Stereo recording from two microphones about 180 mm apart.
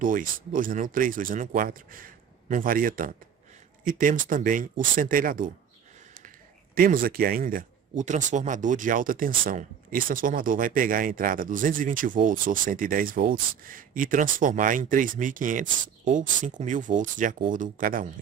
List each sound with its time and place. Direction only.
0.0 s speech: 50° right (ahead or behind)
6.7 s speech: 55° right (ahead or behind)